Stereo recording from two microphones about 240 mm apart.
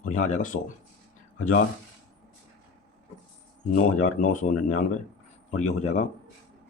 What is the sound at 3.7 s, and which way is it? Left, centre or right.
Speech, left.